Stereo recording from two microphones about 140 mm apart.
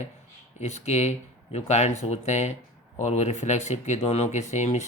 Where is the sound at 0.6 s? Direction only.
50° left (ahead or behind).